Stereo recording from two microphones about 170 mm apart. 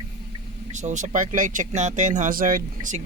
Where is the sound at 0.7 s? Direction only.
45° right (ahead or behind).